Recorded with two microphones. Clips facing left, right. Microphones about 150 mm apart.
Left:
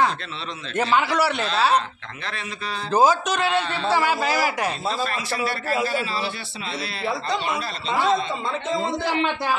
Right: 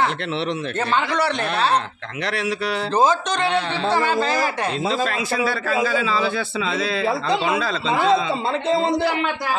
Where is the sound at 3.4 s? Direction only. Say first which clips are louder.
Right 3 dB; 80° right.